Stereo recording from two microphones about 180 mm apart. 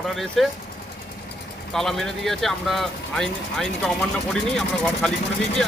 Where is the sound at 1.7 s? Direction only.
Centre (ahead or behind).